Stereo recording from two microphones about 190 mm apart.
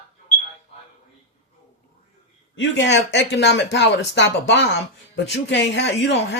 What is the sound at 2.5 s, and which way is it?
Speech, 70° left (ahead or behind).